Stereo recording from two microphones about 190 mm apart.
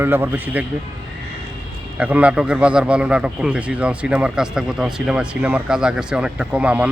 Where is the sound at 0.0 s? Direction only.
10° right (ahead or behind).